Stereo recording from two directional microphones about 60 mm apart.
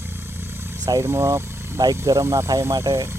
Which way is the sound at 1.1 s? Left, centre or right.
Right.